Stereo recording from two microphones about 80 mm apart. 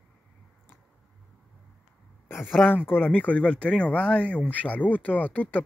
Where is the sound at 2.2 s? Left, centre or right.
Left.